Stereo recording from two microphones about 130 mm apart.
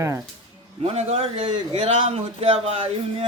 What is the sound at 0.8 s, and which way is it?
Speech, 55° right (ahead or behind).